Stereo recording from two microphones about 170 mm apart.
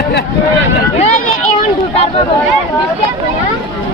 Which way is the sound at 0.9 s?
40° left (ahead or behind).